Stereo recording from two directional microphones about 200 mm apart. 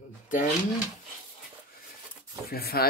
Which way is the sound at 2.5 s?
50° left (ahead or behind).